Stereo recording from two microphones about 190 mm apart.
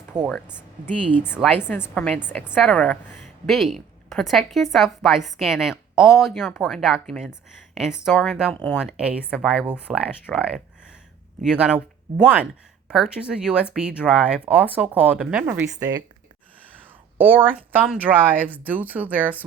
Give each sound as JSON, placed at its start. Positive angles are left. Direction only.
{"t": 0.1, "sound": "speech", "side_deg": -5}
{"t": 0.9, "sound": "a woman's voice", "side_deg": 10}
{"t": 15.8, "sound": "speech", "side_deg": -20}
{"t": 17.2, "sound": "speech", "side_deg": -10}